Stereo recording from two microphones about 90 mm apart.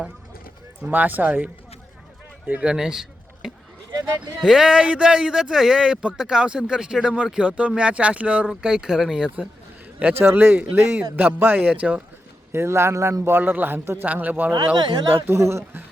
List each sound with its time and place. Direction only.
0.8 s a man's voice: 20° right (ahead or behind)
2.5 s speech: 10° right (ahead or behind)
3.9 s speech: 50° right (ahead or behind)
4.4 s speech: 5° right (ahead or behind)
10.0 s a man's voice: 20° right (ahead or behind)
12.5 s a man's voice: 30° right (ahead or behind)
14.8 s speech: 60° right (ahead or behind)
15.1 s a man's voice: 30° right (ahead or behind)